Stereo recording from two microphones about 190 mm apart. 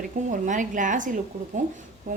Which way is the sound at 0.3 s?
40° right (ahead or behind).